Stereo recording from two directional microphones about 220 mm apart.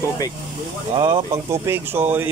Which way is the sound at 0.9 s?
20° right (ahead or behind).